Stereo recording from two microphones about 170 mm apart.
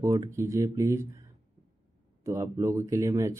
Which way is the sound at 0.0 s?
20° right (ahead or behind).